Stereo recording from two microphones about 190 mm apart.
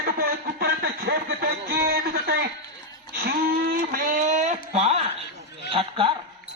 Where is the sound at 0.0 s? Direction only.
55° right (ahead or behind).